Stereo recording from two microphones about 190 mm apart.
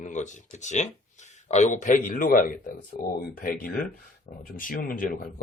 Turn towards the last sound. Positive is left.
turn(degrees=50)  # may be behind; listen again after turning